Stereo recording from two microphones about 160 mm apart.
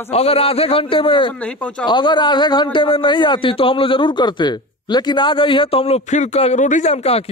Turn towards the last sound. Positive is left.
turn(degrees=40)  # may be behind; listen again after turning